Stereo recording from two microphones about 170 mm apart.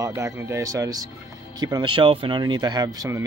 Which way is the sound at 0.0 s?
20° right (ahead or behind).